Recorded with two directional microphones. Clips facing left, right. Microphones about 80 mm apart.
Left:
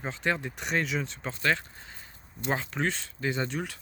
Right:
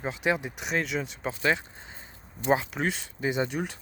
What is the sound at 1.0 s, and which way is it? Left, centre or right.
Speech, centre.